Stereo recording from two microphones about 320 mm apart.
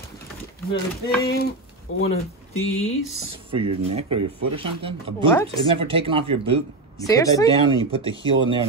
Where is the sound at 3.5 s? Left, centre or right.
Centre.